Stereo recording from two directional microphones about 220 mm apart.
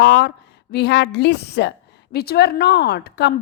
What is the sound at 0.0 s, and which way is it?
A woman's voice, 50° left (ahead or behind).